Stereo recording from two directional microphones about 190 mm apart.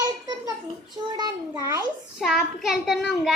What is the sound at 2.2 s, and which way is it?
A child's voice, centre (ahead or behind).